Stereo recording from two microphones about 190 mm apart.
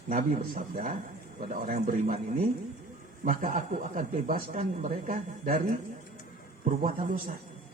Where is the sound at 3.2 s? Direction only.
45° right (ahead or behind).